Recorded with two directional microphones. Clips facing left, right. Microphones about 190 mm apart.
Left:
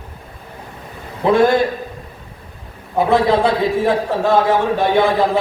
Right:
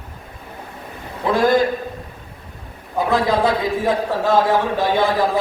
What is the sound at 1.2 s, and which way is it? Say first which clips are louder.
Speech: left 5 dB; 20° left (ahead or behind).